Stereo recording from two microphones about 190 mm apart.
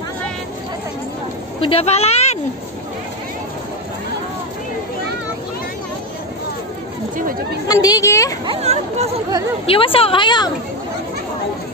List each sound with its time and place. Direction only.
1.6 s speech: 30° left (ahead or behind)
7.6 s speech: 20° left (ahead or behind)
8.5 s speech: 35° right (ahead or behind)
9.7 s a woman's voice: 30° left (ahead or behind)